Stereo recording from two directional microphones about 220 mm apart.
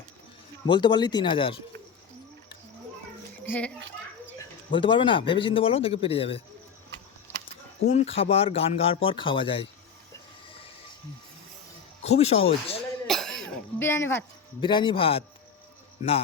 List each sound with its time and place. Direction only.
0.7 s speech: 20° left (ahead or behind)
3.4 s a child's voice: 10° left (ahead or behind)
4.7 s speech: 20° left (ahead or behind)
7.9 s speech: 30° left (ahead or behind)
12.0 s speech: 30° left (ahead or behind)
13.1 s cough: centre (ahead or behind); by 15.2 s 25° left (ahead or behind)